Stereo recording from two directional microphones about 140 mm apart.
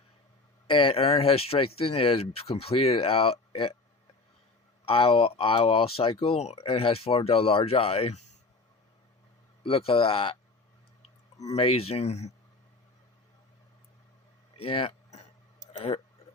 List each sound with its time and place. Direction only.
0.7 s speech: 40° left (ahead or behind)
4.9 s speech: 40° left (ahead or behind)
9.6 s speech: 40° left (ahead or behind)
11.4 s speech: 45° left (ahead or behind)
14.5 s speech: 40° left (ahead or behind)